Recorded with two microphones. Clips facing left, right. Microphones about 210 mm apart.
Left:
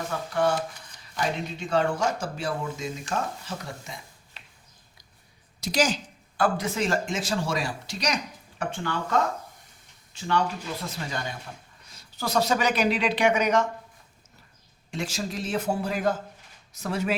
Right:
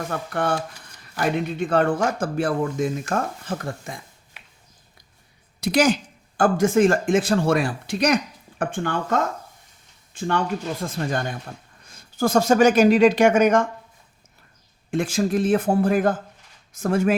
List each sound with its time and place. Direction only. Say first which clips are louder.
0.1 s speech: even; 55° right (ahead or behind)
5.5 s speech: right 6 dB; 60° right (ahead or behind)
14.8 s speech: right 10 dB; 55° right (ahead or behind)